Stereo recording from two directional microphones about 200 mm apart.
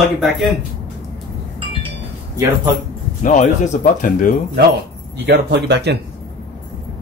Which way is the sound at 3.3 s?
35° left (ahead or behind).